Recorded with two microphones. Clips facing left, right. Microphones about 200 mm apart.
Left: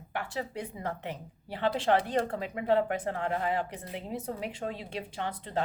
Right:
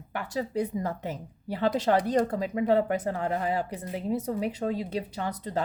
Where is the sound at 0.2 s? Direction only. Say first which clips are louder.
Right 6 dB; 40° right (ahead or behind).